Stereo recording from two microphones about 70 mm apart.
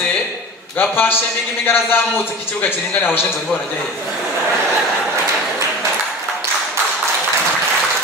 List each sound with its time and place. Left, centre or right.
0.8 s a man's voice: left